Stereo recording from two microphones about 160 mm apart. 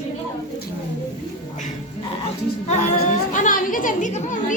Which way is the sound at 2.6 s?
45° left (ahead or behind).